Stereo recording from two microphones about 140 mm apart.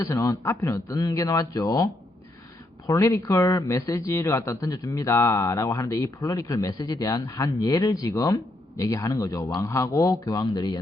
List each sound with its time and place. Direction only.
0.0 s speech: 25° left (ahead or behind)